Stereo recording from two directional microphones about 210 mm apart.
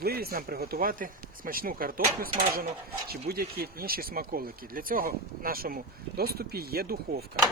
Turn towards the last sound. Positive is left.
turn(degrees=-45)  # may be behind; listen again after turning